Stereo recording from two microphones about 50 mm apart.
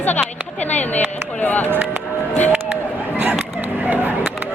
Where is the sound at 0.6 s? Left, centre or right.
Left.